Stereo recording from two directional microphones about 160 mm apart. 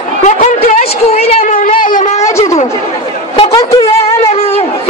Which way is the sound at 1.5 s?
55° left (ahead or behind).